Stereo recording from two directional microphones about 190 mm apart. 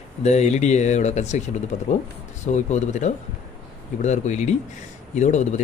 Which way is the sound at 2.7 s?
40° left (ahead or behind).